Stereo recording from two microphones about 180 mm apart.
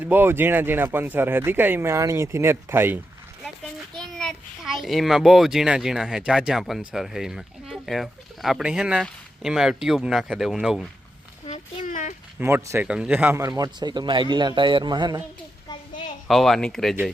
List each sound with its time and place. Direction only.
0.0 s speech: 10° right (ahead or behind)
3.9 s a child's voice: 5° left (ahead or behind)
11.4 s a sound: 40° left (ahead or behind)
12.4 s speech: 15° right (ahead or behind)
16.2 s a child's voice: centre (ahead or behind)